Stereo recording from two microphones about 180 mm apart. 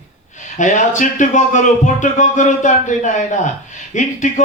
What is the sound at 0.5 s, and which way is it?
Speech, 45° left (ahead or behind).